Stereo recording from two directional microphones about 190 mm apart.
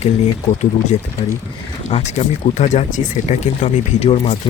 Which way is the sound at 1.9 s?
30° left (ahead or behind).